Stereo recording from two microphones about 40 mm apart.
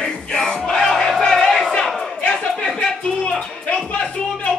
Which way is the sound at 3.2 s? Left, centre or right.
Left.